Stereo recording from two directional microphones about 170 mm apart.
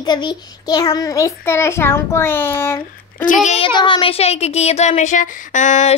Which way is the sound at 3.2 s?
45° left (ahead or behind).